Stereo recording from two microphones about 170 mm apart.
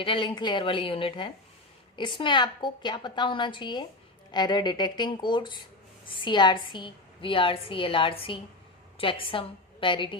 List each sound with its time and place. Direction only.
0.0 s a woman's voice: 30° left (ahead or behind)